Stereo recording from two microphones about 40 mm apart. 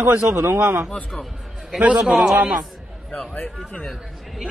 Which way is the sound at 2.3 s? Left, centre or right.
Right.